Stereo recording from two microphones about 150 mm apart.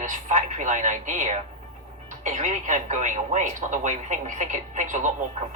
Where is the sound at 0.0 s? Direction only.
55° right (ahead or behind).